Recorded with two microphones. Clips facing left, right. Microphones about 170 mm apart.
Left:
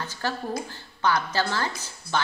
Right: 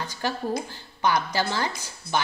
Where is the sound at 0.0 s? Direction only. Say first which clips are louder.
Right 2 dB; 15° right (ahead or behind).